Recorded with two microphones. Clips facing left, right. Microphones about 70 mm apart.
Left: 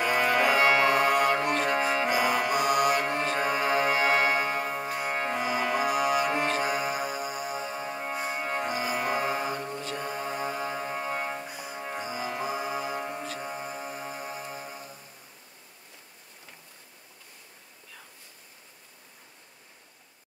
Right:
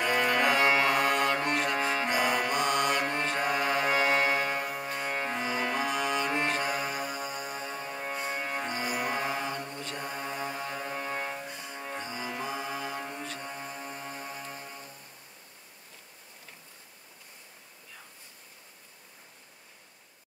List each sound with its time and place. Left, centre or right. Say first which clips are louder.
0.0 s music: left 2 dB; left
4.8 s music: left 3 dB; centre
5.1 s music: left 3 dB; left
5.4 s music: left 4 dB; centre
9.1 s mantra: left 3 dB; centre
10.0 s music: left 3 dB; centre
11.1 s music: left 3 dB; left
11.4 s music: left 3 dB; centre